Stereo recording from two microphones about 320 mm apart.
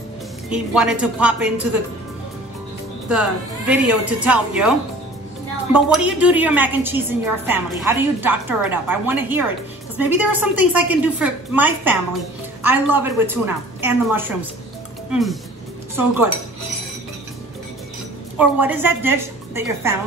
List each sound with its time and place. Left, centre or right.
0.5 s a woman's voice: centre
3.1 s a woman's voice: centre
18.4 s a woman's voice: centre